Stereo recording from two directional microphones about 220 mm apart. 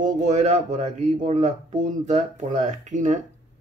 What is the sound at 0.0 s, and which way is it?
Speech, 35° right (ahead or behind).